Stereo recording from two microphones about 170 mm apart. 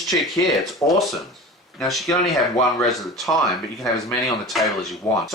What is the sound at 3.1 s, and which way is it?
Speech, centre (ahead or behind).